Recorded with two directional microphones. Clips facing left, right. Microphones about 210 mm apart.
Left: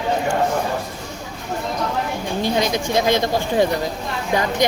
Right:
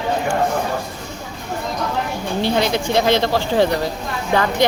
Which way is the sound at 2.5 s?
15° left (ahead or behind).